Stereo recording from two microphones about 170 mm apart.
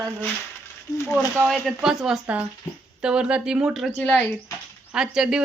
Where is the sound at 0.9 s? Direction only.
20° left (ahead or behind).